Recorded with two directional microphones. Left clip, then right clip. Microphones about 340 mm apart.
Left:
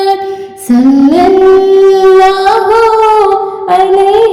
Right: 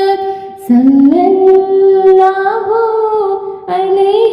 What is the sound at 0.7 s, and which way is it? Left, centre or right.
Singing, left.